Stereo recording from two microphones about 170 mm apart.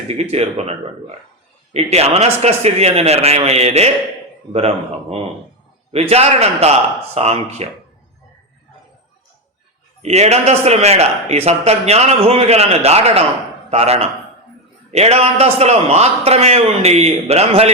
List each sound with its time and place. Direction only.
0.2 s a man's voice: 40° right (ahead or behind)
10.0 s a man's voice: 40° right (ahead or behind)